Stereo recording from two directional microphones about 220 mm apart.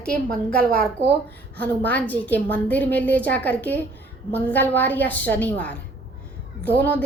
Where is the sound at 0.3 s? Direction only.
40° right (ahead or behind).